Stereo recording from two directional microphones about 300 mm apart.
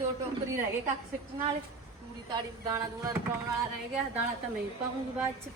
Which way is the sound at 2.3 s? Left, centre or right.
Centre.